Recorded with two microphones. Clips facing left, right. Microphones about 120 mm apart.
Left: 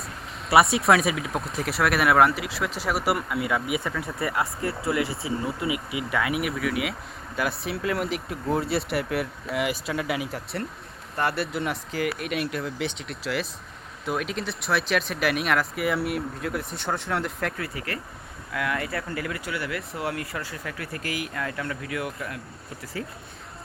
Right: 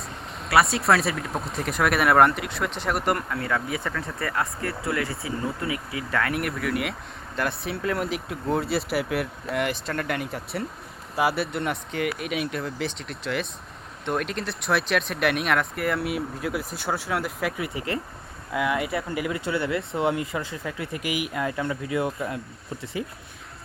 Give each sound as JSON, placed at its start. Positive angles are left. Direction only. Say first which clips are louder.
{"t": 0.5, "sound": "speech", "louder": "left 2 dB", "side_deg": 20}
{"t": 0.8, "sound": "speech", "louder": "left 1 dB", "side_deg": 0}
{"t": 4.2, "sound": "speech", "louder": "left 1 dB", "side_deg": 20}
{"t": 17.6, "sound": "speech", "louder": "right 4 dB", "side_deg": -25}